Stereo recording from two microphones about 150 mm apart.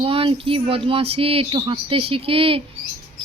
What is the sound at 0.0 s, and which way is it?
Speech, 35° right (ahead or behind).